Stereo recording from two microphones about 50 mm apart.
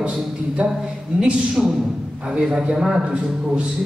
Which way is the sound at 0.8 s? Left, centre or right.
Centre.